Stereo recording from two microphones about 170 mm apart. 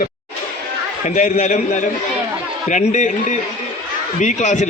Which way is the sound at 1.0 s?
45° left (ahead or behind).